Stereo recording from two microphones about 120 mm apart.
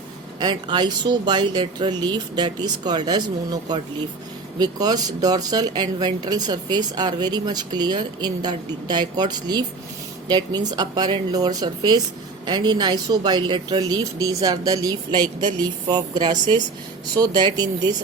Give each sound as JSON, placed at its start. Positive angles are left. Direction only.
{"t": 0.3, "sound": "speech", "side_deg": -35}